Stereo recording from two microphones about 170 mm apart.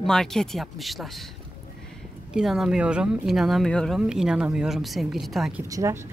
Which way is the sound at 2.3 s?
Centre (ahead or behind).